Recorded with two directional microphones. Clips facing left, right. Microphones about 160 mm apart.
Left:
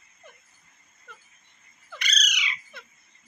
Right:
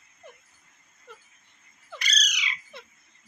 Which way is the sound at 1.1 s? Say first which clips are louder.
Right 3 dB; 30° right (ahead or behind).